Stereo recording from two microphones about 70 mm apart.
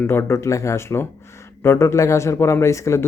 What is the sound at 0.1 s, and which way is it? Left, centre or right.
A man's voice, left.